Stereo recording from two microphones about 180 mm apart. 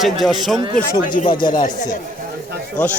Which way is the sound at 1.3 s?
25° left (ahead or behind).